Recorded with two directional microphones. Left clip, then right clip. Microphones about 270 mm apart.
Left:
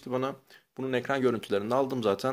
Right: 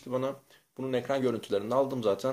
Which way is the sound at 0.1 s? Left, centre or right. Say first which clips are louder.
Even; left.